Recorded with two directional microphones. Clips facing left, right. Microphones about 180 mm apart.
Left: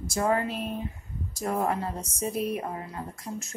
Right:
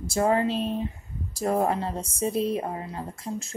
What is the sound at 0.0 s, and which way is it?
A woman's voice, 30° right (ahead or behind).